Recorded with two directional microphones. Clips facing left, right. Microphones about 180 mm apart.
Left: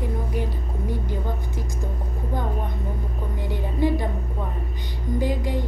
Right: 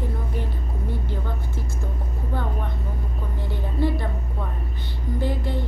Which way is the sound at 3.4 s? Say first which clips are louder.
Left 2 dB; 15° left (ahead or behind).